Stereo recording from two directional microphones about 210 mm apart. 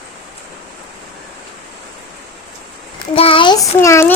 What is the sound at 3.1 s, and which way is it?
Child singing, 25° left (ahead or behind).